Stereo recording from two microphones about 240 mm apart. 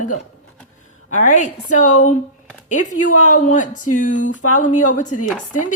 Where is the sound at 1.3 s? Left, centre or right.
Left.